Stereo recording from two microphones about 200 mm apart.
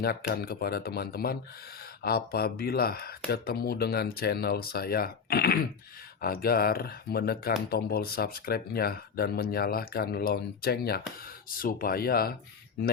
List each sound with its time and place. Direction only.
0.0 s speech: 50° left (ahead or behind)